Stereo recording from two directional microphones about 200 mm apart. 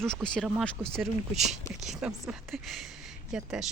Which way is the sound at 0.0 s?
5° left (ahead or behind).